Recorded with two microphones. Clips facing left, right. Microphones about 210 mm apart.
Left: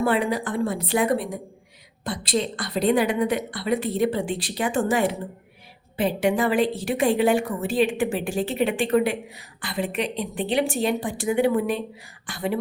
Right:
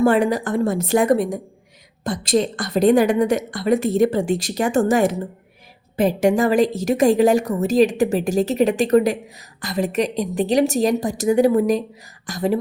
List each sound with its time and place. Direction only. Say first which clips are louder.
0.0 s a woman's voice: right 6 dB; 45° right (ahead or behind)